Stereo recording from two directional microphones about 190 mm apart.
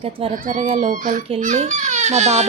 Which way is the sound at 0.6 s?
30° right (ahead or behind).